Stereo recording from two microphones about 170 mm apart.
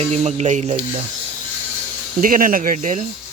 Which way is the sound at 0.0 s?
40° right (ahead or behind).